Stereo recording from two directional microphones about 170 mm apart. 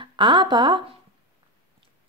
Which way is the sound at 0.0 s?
30° right (ahead or behind).